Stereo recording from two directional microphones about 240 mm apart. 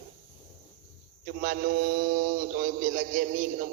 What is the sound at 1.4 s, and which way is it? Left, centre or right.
A man's voice, right.